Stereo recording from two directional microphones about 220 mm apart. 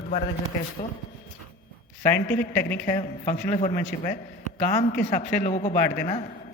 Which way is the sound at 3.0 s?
35° left (ahead or behind).